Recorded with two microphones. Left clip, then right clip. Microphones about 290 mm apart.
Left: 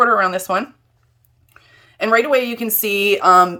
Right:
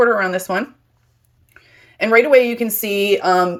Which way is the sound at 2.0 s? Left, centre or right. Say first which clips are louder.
Right 3 dB; centre.